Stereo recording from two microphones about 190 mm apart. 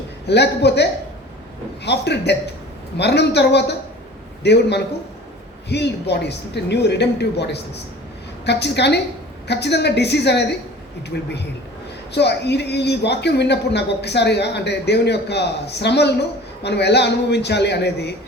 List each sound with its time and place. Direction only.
0.3 s a man's voice: 60° left (ahead or behind)